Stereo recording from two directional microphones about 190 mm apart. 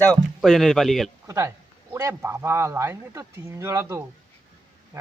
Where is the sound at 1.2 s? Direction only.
15° right (ahead or behind).